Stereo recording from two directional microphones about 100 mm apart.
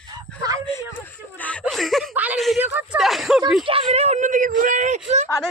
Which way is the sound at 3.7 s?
80° right.